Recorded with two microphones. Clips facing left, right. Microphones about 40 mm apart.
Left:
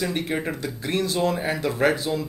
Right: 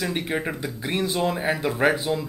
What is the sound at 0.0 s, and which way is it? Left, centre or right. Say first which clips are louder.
Speech: even; centre.